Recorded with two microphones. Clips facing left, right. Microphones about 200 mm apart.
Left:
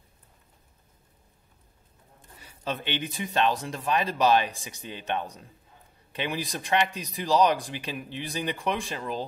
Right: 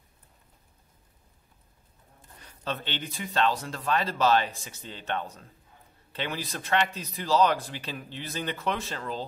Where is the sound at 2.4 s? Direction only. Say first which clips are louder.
Left 2 dB; 10° left (ahead or behind).